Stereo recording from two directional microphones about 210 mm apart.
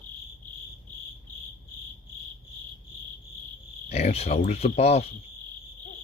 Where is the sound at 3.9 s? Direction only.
30° left (ahead or behind).